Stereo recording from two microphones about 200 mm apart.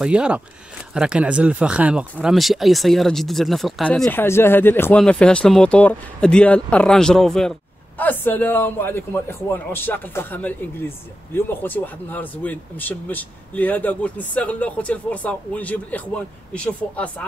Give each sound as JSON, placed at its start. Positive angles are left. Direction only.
{"t": 0.0, "sound": "speech", "side_deg": -5}